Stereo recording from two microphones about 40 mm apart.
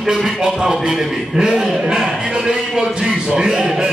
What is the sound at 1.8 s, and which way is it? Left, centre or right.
Music, right.